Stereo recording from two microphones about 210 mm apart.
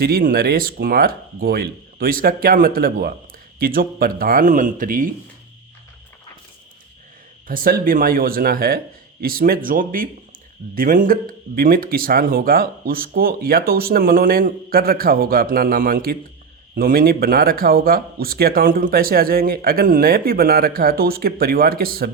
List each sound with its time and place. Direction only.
0.0 s speech: 45° right (ahead or behind)
7.4 s speech: 40° right (ahead or behind)